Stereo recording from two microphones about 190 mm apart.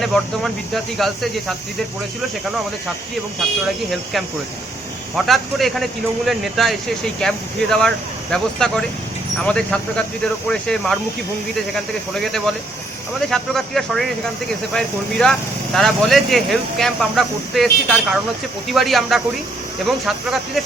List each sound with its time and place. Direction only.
0.0 s speech: centre (ahead or behind)
5.1 s speech: centre (ahead or behind)
12.1 s speech: centre (ahead or behind)